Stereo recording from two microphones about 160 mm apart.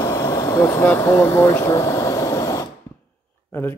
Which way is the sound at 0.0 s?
25° left (ahead or behind).